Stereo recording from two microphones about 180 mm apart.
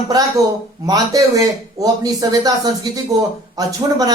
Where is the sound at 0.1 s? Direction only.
20° right (ahead or behind).